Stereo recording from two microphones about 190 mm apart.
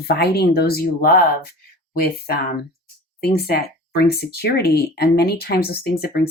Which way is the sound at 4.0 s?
55° left (ahead or behind).